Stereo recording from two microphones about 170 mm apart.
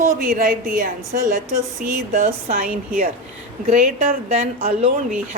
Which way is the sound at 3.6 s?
40° right (ahead or behind).